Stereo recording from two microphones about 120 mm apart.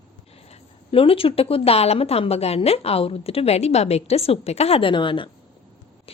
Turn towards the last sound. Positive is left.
turn(degrees=45)  # may be behind; listen again after turning